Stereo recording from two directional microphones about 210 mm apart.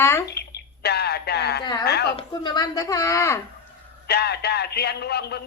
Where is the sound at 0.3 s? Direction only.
50° left (ahead or behind).